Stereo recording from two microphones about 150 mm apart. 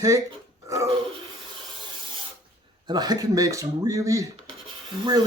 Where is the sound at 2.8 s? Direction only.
25° right (ahead or behind).